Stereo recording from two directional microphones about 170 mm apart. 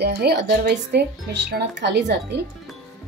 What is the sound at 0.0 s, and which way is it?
Speech, 75° right (ahead or behind).